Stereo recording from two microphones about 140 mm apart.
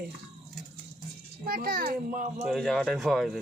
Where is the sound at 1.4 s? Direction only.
90° right; by 2.4 s 70° right (ahead or behind).